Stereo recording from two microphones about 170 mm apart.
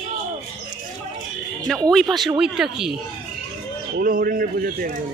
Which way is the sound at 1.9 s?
Centre (ahead or behind).